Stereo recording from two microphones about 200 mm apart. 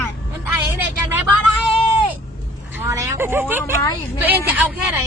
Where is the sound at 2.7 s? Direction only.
15° right (ahead or behind).